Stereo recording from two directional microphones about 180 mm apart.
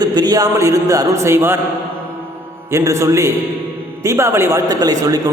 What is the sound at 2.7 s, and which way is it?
Speech, 15° right (ahead or behind).